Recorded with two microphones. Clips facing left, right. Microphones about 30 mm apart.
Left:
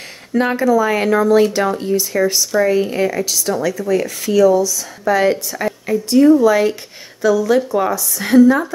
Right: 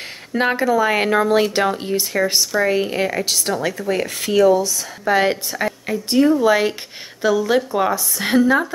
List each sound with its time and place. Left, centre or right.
0.5 s speech: right
3.3 s speech: right
5.0 s speech: right